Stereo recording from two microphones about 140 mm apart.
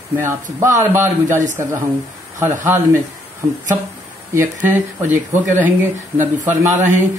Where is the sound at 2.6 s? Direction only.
15° right (ahead or behind).